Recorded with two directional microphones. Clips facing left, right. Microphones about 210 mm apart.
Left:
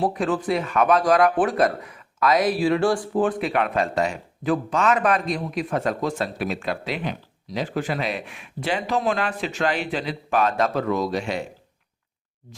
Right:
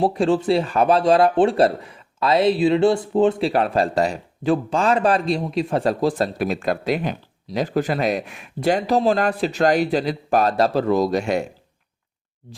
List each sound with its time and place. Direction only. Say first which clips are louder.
0.0 s speech: right 5 dB; 30° right (ahead or behind); by 11.4 s 45° right (ahead or behind)